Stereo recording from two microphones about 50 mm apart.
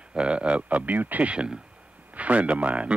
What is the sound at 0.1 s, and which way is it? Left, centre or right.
A man's voice, right.